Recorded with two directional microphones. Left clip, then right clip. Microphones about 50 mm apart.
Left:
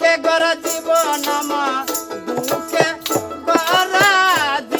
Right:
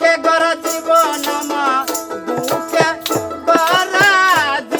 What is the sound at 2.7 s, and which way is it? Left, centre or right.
Music, left.